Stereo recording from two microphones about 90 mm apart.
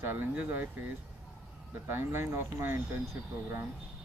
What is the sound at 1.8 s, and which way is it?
Speech, 25° right (ahead or behind).